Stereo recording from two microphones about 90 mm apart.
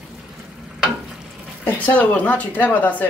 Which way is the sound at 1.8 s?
15° left (ahead or behind).